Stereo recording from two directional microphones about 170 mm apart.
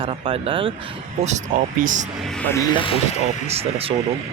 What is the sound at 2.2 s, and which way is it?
Speech, 10° left (ahead or behind).